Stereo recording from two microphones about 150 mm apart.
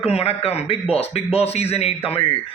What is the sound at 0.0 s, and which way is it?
A man's voice, 45° left (ahead or behind).